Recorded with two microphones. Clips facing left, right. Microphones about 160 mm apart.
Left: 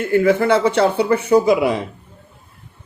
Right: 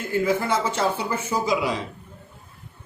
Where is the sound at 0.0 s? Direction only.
65° left (ahead or behind).